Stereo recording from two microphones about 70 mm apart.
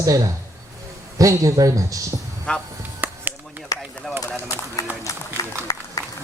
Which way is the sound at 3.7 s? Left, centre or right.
Left.